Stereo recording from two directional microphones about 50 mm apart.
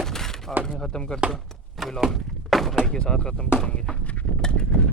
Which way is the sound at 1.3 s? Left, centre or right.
Centre.